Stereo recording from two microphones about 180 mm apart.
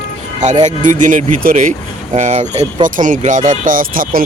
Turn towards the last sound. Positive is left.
turn(degrees=-50)  # may be behind; listen again after turning